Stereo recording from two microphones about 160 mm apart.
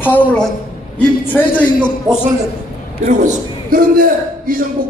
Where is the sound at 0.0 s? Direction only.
10° left (ahead or behind).